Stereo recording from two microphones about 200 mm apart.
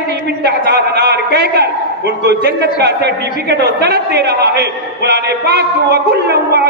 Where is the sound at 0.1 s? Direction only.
55° right (ahead or behind).